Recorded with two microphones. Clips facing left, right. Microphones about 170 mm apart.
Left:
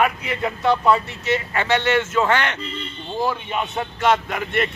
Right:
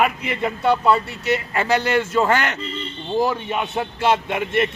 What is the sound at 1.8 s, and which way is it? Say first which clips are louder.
Speech: even; 40° right (ahead or behind).